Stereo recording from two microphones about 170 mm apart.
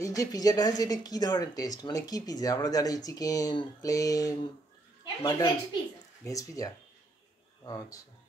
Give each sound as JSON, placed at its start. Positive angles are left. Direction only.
{"t": 0.0, "sound": "speech", "side_deg": 20}